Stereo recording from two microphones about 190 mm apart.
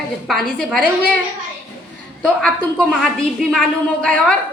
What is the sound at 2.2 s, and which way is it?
Speech, 5° left (ahead or behind).